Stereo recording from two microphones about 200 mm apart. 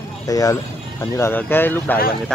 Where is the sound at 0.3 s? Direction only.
15° left (ahead or behind).